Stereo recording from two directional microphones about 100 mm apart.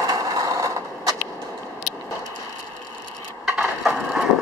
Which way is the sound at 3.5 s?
10° right (ahead or behind).